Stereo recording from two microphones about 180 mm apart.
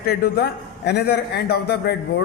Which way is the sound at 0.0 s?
55° left (ahead or behind).